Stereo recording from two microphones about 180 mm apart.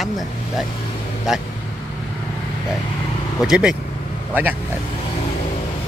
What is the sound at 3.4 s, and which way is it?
Speech, 5° right (ahead or behind).